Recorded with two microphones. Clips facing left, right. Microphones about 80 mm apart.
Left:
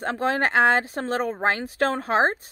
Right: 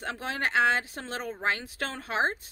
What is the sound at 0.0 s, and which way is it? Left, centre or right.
Speech, left.